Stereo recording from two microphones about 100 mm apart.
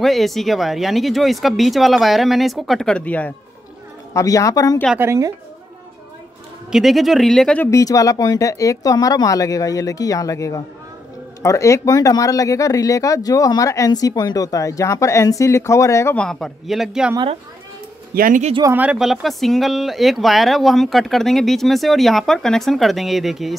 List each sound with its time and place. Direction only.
0.0 s speech: centre (ahead or behind)
3.1 s speech: 15° left (ahead or behind)
4.1 s speech: 35° left (ahead or behind)
4.9 s speech: 30° right (ahead or behind)
6.7 s speech: centre (ahead or behind)
7.7 s speech: 35° left (ahead or behind)
16.2 s speech: 5° left (ahead or behind)
18.7 s speech: 15° right (ahead or behind)
18.9 s speech: centre (ahead or behind)